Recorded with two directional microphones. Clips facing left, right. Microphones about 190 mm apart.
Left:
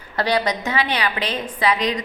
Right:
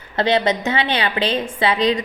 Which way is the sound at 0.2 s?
25° right (ahead or behind).